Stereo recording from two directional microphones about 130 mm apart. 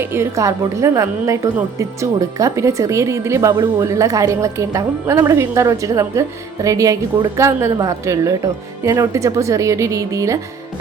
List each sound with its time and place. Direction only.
0.0 s a woman's voice: 20° right (ahead or behind)